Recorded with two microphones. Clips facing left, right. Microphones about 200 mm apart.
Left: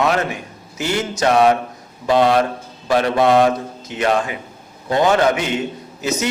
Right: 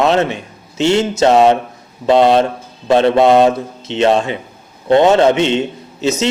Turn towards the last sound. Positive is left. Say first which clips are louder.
# right 5 dB
turn(degrees=-25)  # may be behind; listen again after turning